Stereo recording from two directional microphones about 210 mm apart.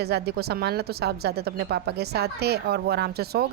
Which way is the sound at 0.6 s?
50° right (ahead or behind).